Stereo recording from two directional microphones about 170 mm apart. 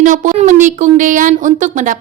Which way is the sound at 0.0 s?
50° right (ahead or behind).